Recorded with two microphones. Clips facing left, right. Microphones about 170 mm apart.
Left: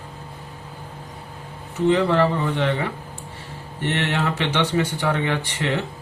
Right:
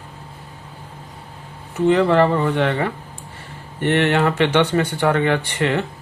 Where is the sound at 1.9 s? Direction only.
60° right (ahead or behind).